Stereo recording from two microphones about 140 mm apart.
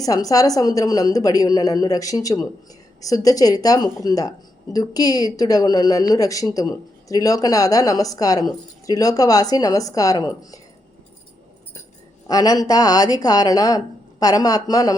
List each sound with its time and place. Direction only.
0.0 s a woman's voice: 25° left (ahead or behind)
12.3 s a woman's voice: 25° left (ahead or behind)